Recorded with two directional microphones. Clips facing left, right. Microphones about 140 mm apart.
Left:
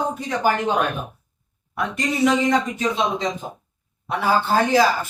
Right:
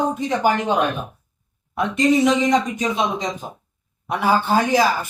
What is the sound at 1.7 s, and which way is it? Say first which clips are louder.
A man's voice: right 7 dB; 20° right (ahead or behind).